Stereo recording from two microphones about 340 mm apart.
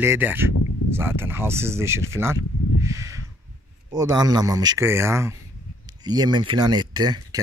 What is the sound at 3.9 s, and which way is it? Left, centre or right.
Speech, centre.